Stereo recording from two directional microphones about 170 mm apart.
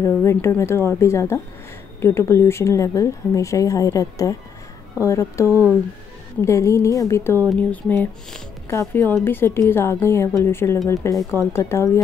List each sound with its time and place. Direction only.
0.0 s speech: 15° left (ahead or behind)